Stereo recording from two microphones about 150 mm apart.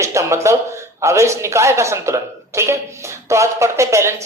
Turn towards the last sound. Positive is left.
turn(degrees=-20)  # may be behind; listen again after turning